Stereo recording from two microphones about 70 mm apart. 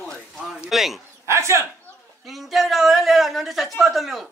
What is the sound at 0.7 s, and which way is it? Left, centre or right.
Speech, centre.